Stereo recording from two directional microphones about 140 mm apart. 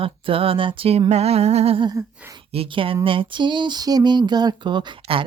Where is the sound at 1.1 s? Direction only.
50° right (ahead or behind).